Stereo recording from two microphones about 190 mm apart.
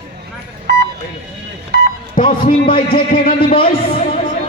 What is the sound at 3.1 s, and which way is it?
Speech, 50° left (ahead or behind).